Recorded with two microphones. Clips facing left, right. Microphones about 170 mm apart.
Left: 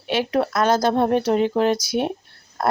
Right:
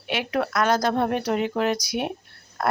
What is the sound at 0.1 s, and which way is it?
Speech, 30° left (ahead or behind).